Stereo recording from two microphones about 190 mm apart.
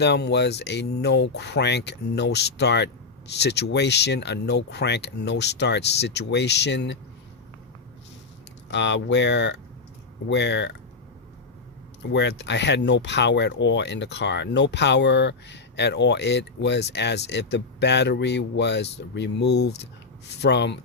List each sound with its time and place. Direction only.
0.0 s speech: 60° left (ahead or behind)
8.7 s speech: 70° left (ahead or behind)
12.1 s speech: 65° left (ahead or behind)